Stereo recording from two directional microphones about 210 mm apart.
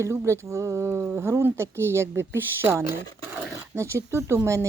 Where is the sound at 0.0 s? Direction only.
15° right (ahead or behind).